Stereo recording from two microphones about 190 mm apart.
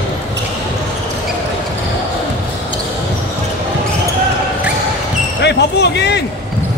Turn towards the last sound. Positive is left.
turn(degrees=65)  # may be behind; listen again after turning